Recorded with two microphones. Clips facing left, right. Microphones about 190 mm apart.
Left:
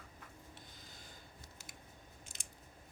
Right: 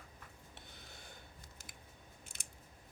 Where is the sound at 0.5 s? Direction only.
65° right (ahead or behind).